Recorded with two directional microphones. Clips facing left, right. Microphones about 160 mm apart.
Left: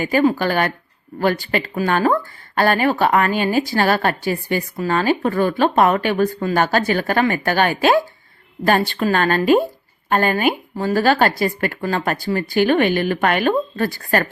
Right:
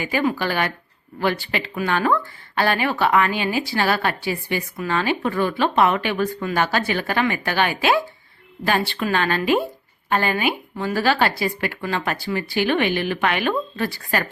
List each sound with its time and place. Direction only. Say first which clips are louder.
0.0 s a woman's voice: left 5 dB; 45° left (ahead or behind)